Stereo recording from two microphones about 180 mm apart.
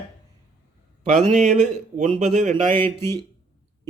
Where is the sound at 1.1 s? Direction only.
40° right (ahead or behind).